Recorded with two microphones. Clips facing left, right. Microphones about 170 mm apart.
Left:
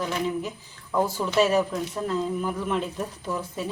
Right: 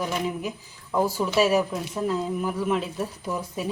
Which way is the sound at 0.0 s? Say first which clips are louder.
Even; 10° right (ahead or behind).